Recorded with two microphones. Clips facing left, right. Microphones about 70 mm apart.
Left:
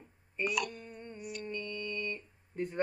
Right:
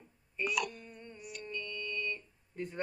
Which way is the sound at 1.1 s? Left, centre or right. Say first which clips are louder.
Left 6 dB; centre.